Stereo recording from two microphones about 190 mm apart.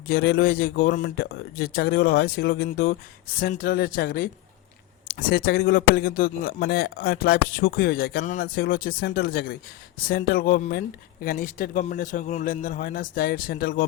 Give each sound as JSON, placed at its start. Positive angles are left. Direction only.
{"t": 0.1, "sound": "speech", "side_deg": 60}